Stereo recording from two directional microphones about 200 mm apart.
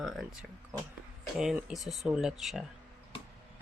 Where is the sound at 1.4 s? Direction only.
5° right (ahead or behind).